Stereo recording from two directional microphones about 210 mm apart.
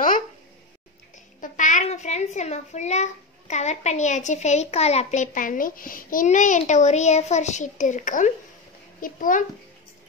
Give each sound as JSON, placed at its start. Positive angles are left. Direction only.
{"t": 1.4, "sound": "a child's voice", "side_deg": 35}